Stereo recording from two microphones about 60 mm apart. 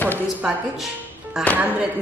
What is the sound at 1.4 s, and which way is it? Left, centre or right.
Speech, centre.